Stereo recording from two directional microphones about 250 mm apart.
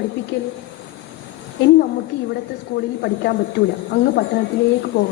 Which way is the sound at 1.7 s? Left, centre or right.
Left.